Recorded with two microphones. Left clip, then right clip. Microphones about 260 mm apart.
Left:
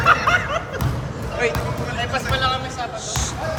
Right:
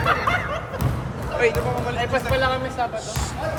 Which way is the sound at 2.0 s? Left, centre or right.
Right.